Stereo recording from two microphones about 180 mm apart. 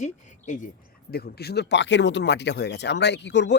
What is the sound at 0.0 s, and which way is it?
Speech, 45° left (ahead or behind).